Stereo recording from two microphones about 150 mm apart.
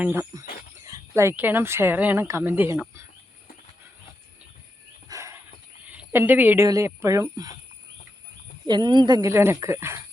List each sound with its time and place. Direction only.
0.0 s speech: 15° right (ahead or behind)
5.0 s dog: 20° right (ahead or behind)
5.9 s a woman's voice: 15° right (ahead or behind)
8.6 s speech: 30° right (ahead or behind)